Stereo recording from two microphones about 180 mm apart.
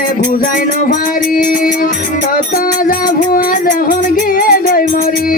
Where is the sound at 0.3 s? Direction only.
50° left (ahead or behind).